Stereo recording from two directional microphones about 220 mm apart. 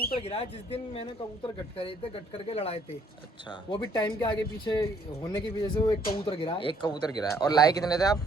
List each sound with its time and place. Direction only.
0.2 s speech: 25° left (ahead or behind)